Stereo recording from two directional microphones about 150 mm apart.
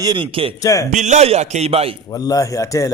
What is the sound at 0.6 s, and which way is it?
Speech, 20° left (ahead or behind).